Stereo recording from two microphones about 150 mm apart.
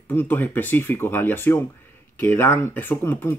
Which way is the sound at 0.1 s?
15° left (ahead or behind).